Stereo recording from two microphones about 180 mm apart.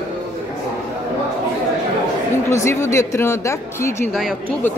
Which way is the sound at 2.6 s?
15° left (ahead or behind).